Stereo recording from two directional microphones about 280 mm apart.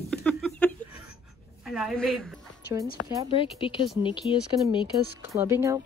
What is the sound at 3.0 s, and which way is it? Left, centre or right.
Speech, left.